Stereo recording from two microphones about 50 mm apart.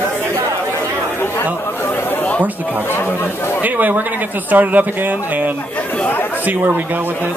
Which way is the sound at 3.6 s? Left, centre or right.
Right.